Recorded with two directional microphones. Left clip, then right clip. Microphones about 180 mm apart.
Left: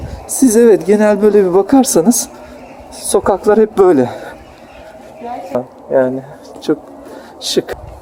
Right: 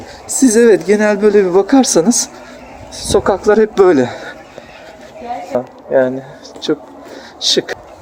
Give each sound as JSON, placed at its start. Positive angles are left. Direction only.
{"t": 0.3, "sound": "speech", "side_deg": 20}
{"t": 2.9, "sound": "speech", "side_deg": 10}
{"t": 5.5, "sound": "speech", "side_deg": 0}
{"t": 6.6, "sound": "speech", "side_deg": 20}